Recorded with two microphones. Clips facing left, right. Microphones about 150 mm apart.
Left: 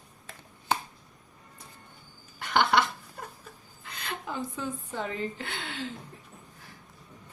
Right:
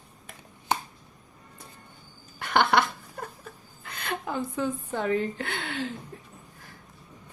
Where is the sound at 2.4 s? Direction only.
55° right (ahead or behind).